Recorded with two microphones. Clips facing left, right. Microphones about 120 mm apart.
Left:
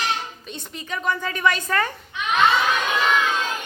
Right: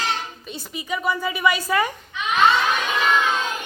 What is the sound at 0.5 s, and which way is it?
A woman's voice, 10° right (ahead or behind).